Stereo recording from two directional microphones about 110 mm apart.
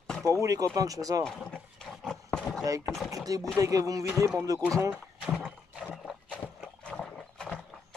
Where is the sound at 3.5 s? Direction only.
30° right (ahead or behind).